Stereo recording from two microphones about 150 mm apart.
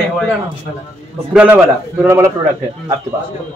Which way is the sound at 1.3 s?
10° right (ahead or behind).